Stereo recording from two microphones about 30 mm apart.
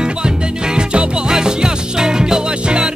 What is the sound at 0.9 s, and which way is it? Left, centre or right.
Music, right.